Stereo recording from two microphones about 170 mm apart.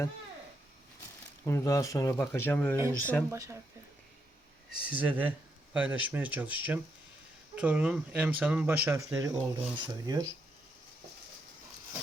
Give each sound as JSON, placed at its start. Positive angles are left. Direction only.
{"t": 1.5, "sound": "speech", "side_deg": 15}
{"t": 3.2, "sound": "speech", "side_deg": -20}
{"t": 4.8, "sound": "speech", "side_deg": -10}